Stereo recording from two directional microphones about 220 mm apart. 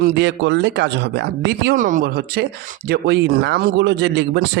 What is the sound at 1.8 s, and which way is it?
Speech, 35° right (ahead or behind).